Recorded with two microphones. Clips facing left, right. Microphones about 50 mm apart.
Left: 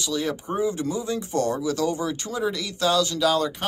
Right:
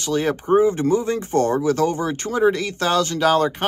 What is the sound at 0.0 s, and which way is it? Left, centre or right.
A man's voice, right.